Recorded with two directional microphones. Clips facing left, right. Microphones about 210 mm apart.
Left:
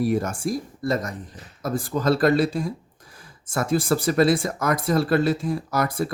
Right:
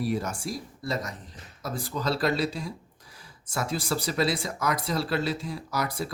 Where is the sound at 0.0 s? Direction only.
50° left (ahead or behind).